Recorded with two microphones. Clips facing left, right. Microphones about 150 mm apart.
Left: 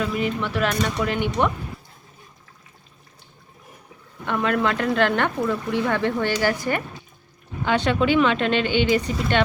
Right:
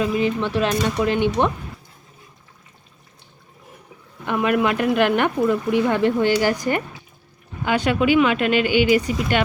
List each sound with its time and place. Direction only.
0.0 s speech: 20° right (ahead or behind)
4.3 s speech: 15° right (ahead or behind)